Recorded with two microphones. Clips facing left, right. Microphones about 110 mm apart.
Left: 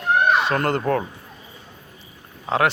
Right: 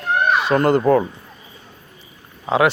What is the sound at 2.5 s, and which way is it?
Speech, 5° right (ahead or behind).